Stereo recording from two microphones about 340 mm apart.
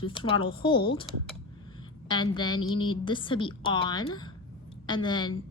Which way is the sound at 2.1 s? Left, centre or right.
Centre.